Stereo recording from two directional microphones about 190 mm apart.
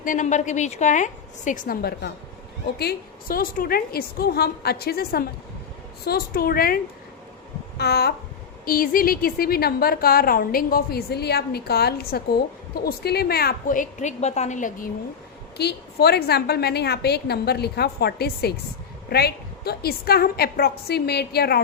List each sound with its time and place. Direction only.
0.0 s a woman's voice: 40° left (ahead or behind)
7.8 s a woman's voice: 60° left (ahead or behind); by 14.8 s 40° left (ahead or behind)
15.5 s a woman's voice: 60° left (ahead or behind)